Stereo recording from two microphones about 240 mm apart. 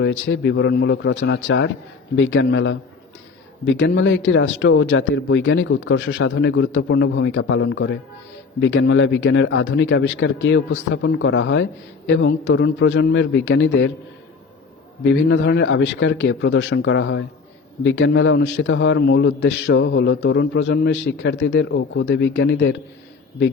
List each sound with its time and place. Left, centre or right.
0.0 s speech: left
15.0 s speech: left